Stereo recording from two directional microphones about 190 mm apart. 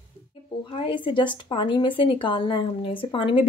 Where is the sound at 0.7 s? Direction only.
25° left (ahead or behind).